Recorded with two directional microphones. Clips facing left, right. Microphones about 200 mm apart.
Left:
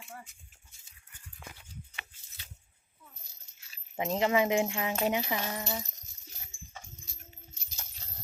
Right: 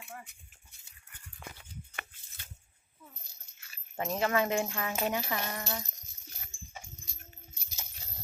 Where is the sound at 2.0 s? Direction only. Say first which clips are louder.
Right 4 dB; 50° right (ahead or behind).